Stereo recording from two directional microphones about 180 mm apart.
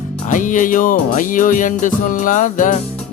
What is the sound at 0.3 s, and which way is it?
Music, 45° left (ahead or behind).